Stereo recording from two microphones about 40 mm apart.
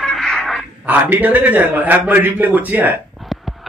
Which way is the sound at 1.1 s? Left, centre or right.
Right.